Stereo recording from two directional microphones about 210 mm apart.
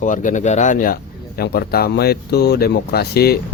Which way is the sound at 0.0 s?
35° left (ahead or behind).